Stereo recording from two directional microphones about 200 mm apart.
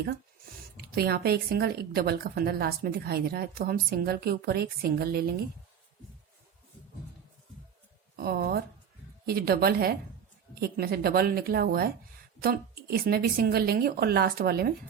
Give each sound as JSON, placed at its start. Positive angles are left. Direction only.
{"t": 0.8, "sound": "a woman's voice", "side_deg": -50}
{"t": 8.1, "sound": "a woman's voice", "side_deg": -50}